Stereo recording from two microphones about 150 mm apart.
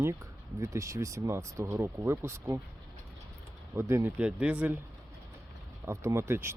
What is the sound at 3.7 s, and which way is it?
Speech, 15° right (ahead or behind).